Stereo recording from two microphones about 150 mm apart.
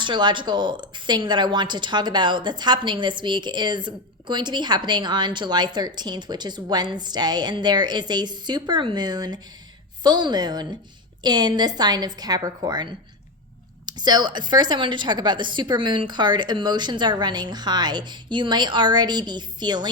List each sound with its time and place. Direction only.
0.0 s a woman's voice: 30° right (ahead or behind)